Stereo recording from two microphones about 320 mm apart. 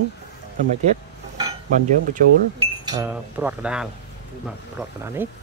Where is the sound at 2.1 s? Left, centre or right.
Centre.